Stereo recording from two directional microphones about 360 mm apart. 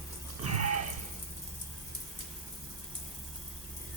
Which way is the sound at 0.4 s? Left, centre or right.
Right.